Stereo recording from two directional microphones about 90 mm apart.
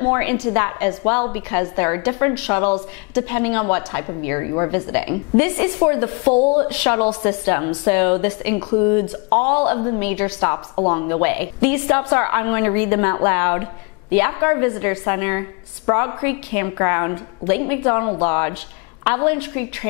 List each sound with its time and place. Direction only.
0.0 s a woman's voice: 20° left (ahead or behind)